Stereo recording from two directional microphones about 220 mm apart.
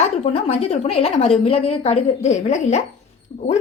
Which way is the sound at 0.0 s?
30° left (ahead or behind).